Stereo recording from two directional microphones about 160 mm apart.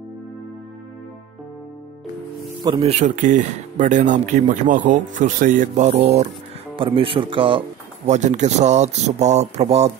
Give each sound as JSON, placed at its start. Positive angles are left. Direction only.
{"t": 2.8, "sound": "speech", "side_deg": -40}
{"t": 8.1, "sound": "speech", "side_deg": -45}